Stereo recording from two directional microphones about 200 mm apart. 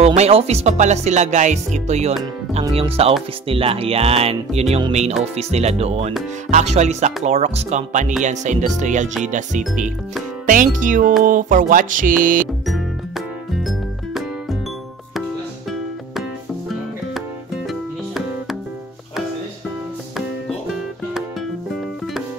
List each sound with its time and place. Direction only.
0.0 s speech: 30° right (ahead or behind)
12.2 s music: 40° right (ahead or behind)
13.6 s music: centre (ahead or behind)
17.6 s music: centre (ahead or behind)
20.2 s music: centre (ahead or behind)